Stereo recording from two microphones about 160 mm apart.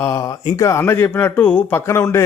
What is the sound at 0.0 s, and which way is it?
Speech, 20° left (ahead or behind).